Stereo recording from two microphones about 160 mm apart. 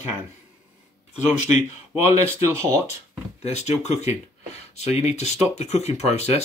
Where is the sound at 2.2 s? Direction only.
15° right (ahead or behind).